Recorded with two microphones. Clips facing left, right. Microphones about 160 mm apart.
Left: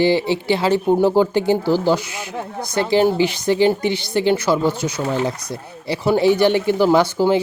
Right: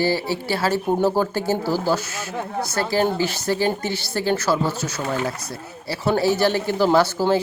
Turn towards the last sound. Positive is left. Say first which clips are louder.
# left 3 dB
turn(degrees=15)  # may be behind; listen again after turning